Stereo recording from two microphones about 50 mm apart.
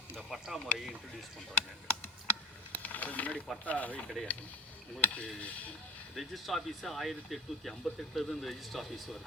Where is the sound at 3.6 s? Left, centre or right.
Left.